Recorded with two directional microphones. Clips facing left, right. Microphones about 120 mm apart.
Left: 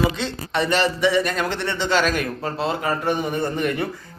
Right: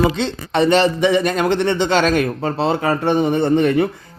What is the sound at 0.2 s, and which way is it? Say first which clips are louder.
Speech: right 6 dB; 25° right (ahead or behind).